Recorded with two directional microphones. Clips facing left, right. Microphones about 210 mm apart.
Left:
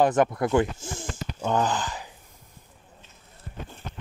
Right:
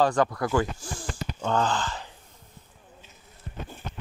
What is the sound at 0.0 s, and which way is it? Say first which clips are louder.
Speech: left 2 dB; 20° left (ahead or behind).